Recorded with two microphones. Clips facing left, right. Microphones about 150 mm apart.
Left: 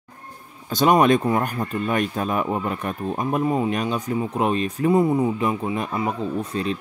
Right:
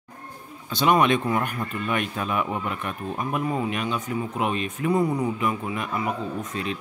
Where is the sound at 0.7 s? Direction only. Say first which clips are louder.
Left 4 dB; 40° left (ahead or behind).